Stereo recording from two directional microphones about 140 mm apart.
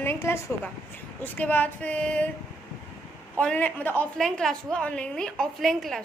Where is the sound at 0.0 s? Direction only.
20° left (ahead or behind).